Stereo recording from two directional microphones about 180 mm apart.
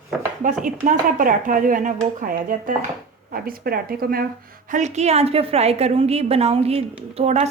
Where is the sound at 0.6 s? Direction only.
45° right (ahead or behind).